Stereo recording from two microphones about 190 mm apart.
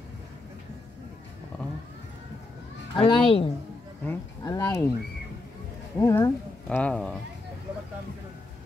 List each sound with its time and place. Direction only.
3.0 s a woman's voice: 25° left (ahead or behind)
4.0 s speech: 10° left (ahead or behind)
5.9 s speech: 15° left (ahead or behind)